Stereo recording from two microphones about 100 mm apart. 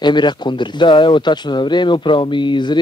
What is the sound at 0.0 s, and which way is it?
Speech, 50° left (ahead or behind).